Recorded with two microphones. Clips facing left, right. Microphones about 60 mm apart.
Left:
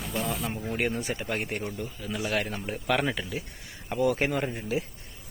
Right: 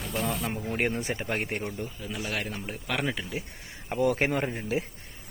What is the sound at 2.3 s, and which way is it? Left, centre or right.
Speech, centre.